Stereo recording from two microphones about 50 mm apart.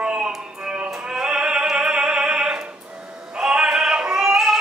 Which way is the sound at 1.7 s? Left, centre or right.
Right.